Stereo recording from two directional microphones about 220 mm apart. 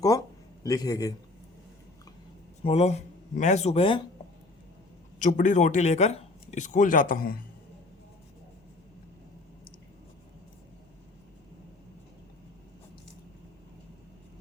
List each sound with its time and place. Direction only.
0.6 s a man's voice: 15° left (ahead or behind)
2.6 s a man's voice: 30° left (ahead or behind)
5.2 s speech: 35° left (ahead or behind)